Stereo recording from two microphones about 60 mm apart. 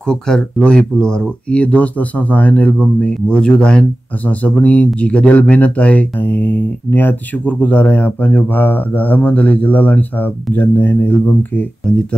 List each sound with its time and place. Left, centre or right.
0.0 s speech: centre; by 11.6 s left